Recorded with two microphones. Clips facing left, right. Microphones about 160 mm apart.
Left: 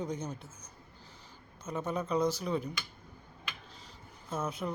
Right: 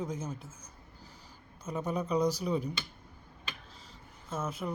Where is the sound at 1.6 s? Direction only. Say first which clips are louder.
Right 1 dB; 10° right (ahead or behind).